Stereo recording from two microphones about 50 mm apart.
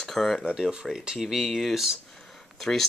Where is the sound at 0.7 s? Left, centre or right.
Centre.